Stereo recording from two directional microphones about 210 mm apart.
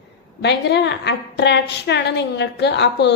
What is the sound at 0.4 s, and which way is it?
A woman's voice, 55° left (ahead or behind).